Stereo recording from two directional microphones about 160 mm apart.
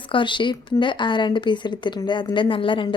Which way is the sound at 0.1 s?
30° left (ahead or behind).